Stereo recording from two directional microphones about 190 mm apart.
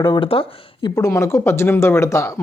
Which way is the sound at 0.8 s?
15° left (ahead or behind).